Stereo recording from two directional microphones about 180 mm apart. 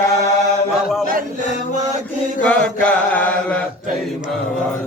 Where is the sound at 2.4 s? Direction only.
5° left (ahead or behind).